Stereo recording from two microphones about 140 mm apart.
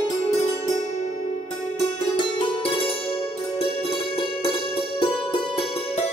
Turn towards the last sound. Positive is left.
turn(degrees=40)  # may be behind; listen again after turning